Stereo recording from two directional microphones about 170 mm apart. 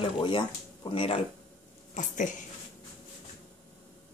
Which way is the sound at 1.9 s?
45° left (ahead or behind).